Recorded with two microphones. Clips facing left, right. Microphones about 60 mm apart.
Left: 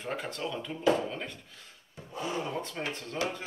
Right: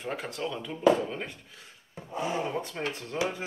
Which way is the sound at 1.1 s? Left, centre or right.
Centre.